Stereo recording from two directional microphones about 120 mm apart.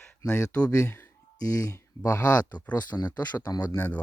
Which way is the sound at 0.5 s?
10° left (ahead or behind).